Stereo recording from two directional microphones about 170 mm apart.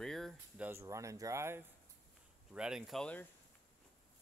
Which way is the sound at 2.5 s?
5° right (ahead or behind).